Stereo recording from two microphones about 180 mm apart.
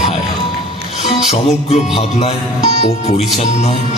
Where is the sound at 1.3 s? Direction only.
35° left (ahead or behind).